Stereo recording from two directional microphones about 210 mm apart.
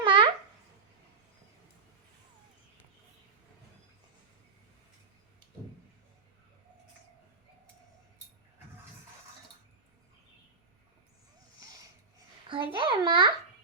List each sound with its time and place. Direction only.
0.0 s babbling: 25° right (ahead or behind)
12.5 s a child's voice: 25° right (ahead or behind)